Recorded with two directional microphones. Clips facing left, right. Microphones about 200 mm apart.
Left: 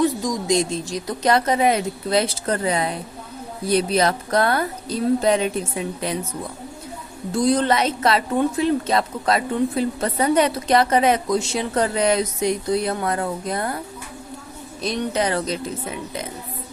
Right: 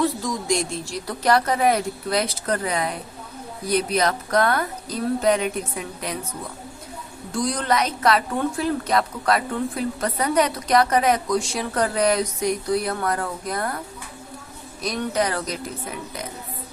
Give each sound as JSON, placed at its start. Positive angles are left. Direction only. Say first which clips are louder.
{"t": 0.2, "sound": "a woman's voice", "louder": "left 3 dB", "side_deg": 20}
{"t": 7.3, "sound": "a woman's voice", "louder": "left 4 dB", "side_deg": 25}
{"t": 14.8, "sound": "a woman's voice", "louder": "left 1 dB", "side_deg": 25}